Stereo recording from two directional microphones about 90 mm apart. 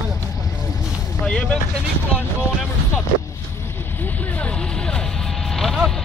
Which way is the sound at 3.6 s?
25° left (ahead or behind).